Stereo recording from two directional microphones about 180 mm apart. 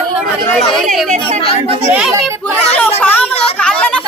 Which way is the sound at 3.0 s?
10° left (ahead or behind).